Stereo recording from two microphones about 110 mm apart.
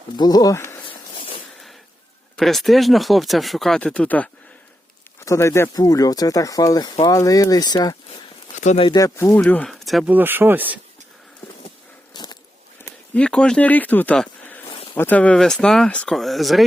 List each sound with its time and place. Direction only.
0.2 s speech: 35° left (ahead or behind)
0.5 s speech: 25° left (ahead or behind)
0.9 s a sound: 55° left (ahead or behind)
2.3 s speech: centre (ahead or behind)
5.2 s speech: 25° left (ahead or behind)
8.1 s a sound: 85° left
9.0 s speech: 30° left (ahead or behind)
9.6 s speech: centre (ahead or behind)
10.1 s speech: 15° right (ahead or behind)
12.1 s a sound: 40° left (ahead or behind)
13.1 s speech: 10° left (ahead or behind)